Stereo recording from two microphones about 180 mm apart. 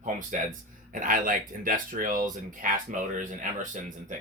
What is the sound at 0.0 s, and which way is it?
Speech, 45° right (ahead or behind).